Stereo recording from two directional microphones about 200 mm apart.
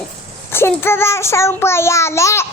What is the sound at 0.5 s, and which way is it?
Child singing, 10° left (ahead or behind).